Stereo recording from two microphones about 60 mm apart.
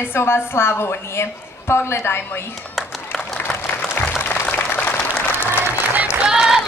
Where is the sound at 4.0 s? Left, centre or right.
Left.